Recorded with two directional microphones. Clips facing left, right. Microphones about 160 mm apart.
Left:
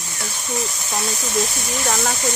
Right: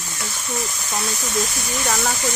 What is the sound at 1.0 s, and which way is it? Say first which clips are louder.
Speech: left 2 dB; 25° left (ahead or behind).